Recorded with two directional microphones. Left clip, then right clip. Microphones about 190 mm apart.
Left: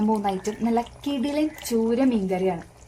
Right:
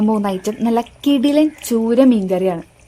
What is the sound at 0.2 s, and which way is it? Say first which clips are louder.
A woman's voice: right 6 dB; 55° right (ahead or behind).